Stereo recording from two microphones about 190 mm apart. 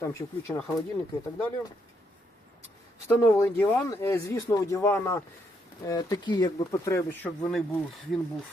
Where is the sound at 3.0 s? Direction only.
15° left (ahead or behind).